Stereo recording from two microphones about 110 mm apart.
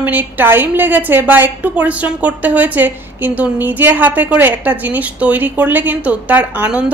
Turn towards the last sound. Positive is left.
turn(degrees=-10)  # may be behind; listen again after turning